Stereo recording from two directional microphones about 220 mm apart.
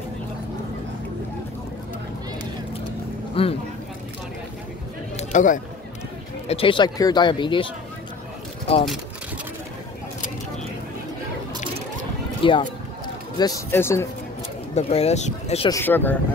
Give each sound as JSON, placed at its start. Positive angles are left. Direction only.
{"t": 3.4, "sound": "speech", "side_deg": 25}
{"t": 5.1, "sound": "a sound", "side_deg": 35}
{"t": 6.4, "sound": "speech", "side_deg": 25}
{"t": 12.4, "sound": "speech", "side_deg": 25}
{"t": 13.4, "sound": "speech", "side_deg": 15}
{"t": 14.8, "sound": "speech", "side_deg": 30}
{"t": 15.7, "sound": "speech", "side_deg": 10}